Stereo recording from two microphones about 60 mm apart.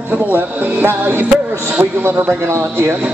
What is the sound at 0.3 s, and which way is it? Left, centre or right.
Music, right.